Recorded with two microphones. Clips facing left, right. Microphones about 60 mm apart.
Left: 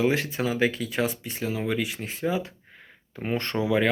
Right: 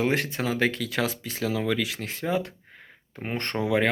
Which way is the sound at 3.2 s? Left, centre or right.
Right.